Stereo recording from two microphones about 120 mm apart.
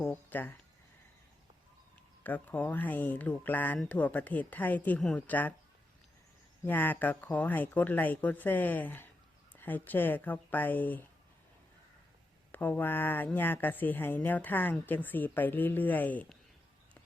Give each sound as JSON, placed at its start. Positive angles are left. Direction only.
{"t": 0.0, "sound": "speech", "side_deg": 15}
{"t": 2.2, "sound": "speech", "side_deg": 15}
{"t": 6.7, "sound": "speech", "side_deg": 15}
{"t": 12.5, "sound": "speech", "side_deg": 15}